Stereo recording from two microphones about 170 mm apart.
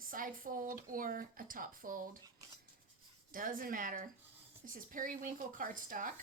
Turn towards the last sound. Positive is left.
turn(degrees=-50)  # may be behind; listen again after turning